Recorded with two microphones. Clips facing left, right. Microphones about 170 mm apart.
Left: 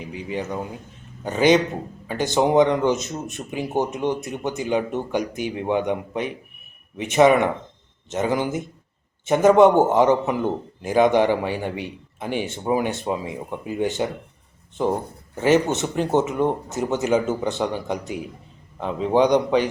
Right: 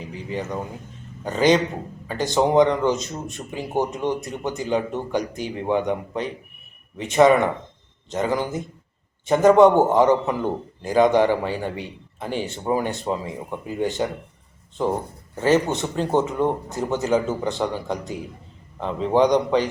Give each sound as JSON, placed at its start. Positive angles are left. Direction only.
{"t": 0.0, "sound": "a man's voice", "side_deg": 15}
{"t": 15.4, "sound": "a man's voice", "side_deg": 20}